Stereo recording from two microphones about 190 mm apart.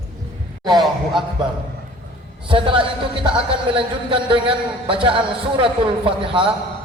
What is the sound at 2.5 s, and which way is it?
A man's voice, 25° right (ahead or behind).